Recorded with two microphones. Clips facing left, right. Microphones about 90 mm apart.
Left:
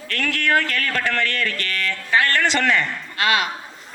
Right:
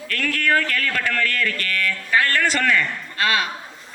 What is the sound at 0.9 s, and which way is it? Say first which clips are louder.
Speech: left 1 dB; 30° left (ahead or behind).